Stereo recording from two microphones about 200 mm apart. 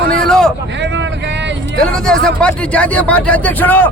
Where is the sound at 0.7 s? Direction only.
65° right (ahead or behind).